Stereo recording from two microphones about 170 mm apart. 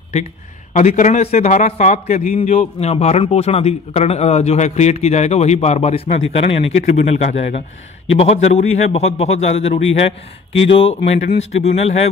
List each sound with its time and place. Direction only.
0.7 s a man's voice: 45° left (ahead or behind)